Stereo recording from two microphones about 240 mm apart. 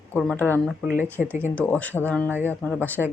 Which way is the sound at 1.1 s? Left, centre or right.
Centre.